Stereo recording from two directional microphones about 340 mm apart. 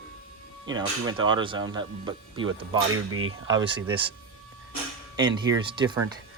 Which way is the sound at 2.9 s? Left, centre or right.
Right.